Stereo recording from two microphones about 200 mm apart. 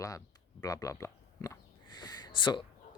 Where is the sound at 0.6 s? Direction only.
15° left (ahead or behind).